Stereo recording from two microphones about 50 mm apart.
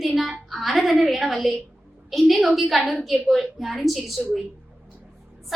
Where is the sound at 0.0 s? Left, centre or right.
Centre.